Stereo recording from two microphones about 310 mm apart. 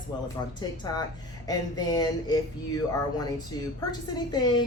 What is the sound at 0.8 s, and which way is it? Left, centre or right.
Speech, centre.